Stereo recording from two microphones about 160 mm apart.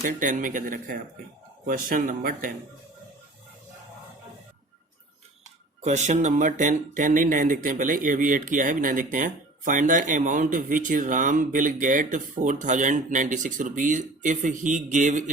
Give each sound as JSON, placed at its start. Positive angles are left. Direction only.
{"t": 0.0, "sound": "speech", "side_deg": -55}
{"t": 5.8, "sound": "speech", "side_deg": -45}